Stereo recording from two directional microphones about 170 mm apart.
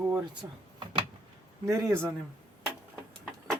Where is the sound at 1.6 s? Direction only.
15° right (ahead or behind).